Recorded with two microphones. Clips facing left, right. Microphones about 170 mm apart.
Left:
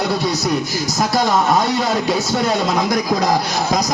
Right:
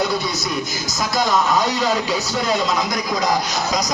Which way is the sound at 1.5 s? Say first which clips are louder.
Left 2 dB; 55° left (ahead or behind).